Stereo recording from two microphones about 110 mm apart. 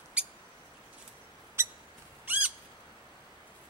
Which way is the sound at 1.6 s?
25° right (ahead or behind).